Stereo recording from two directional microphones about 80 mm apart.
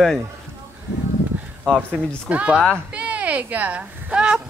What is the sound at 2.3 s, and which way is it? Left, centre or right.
A woman's voice, centre.